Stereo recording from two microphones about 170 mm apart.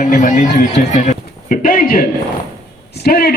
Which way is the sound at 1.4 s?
55° left (ahead or behind).